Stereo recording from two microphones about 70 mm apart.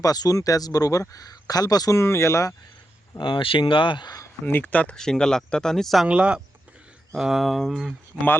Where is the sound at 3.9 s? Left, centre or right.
Left.